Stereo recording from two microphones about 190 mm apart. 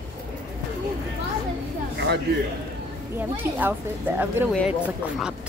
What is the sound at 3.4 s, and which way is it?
Speech, 10° right (ahead or behind).